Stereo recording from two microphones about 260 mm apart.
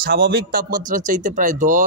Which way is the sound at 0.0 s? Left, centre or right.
Right.